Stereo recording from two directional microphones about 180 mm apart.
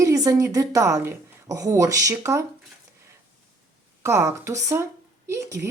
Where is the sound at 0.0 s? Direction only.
20° right (ahead or behind).